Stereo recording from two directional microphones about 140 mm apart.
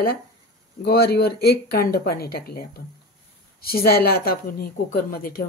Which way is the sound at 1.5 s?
90° left.